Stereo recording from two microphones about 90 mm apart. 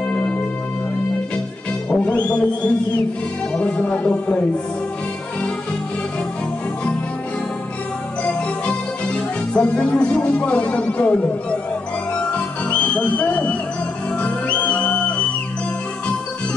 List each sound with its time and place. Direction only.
0.1 s music: 15° left (ahead or behind)
1.9 s music: 15° left (ahead or behind)
8.2 s music: 15° left (ahead or behind)
13.2 s music: 15° left (ahead or behind)